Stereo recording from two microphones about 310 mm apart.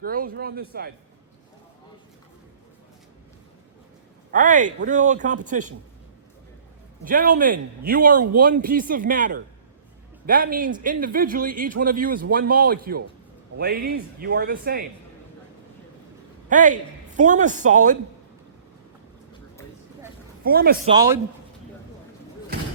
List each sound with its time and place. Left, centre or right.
0.0 s a man's voice: right
4.3 s a man's voice: right
7.0 s a man's voice: right
16.5 s a man's voice: right
20.4 s a man's voice: right
20.8 s speech: centre